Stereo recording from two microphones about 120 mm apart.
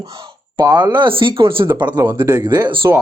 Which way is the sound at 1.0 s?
45° right (ahead or behind).